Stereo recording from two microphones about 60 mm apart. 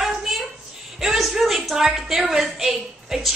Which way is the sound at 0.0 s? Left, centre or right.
Centre.